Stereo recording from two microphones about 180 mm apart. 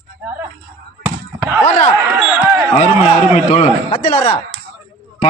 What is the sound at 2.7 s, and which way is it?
A man's voice, 35° left (ahead or behind).